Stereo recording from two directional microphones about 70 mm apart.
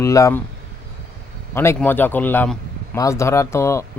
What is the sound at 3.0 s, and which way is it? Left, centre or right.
Speech, left.